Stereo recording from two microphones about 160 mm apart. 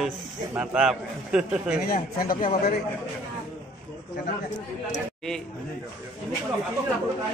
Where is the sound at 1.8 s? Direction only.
70° left (ahead or behind).